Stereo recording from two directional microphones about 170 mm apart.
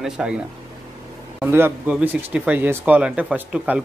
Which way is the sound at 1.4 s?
15° right (ahead or behind).